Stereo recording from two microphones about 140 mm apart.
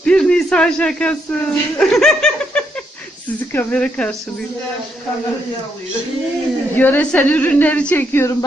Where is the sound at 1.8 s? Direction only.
Centre (ahead or behind).